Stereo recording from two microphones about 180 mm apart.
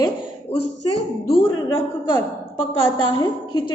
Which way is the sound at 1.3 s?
25° left (ahead or behind).